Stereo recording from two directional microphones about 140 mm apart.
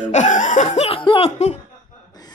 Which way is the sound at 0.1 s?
60° left (ahead or behind).